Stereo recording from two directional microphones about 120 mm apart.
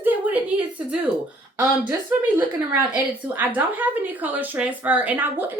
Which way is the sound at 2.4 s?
15° right (ahead or behind).